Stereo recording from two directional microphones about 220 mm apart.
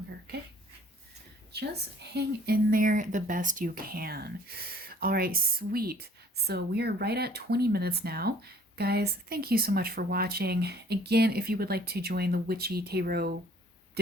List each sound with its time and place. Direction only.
1.5 s a woman's voice: 50° right (ahead or behind)